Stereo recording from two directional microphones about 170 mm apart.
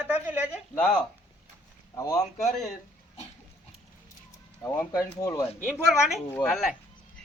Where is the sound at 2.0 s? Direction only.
20° left (ahead or behind).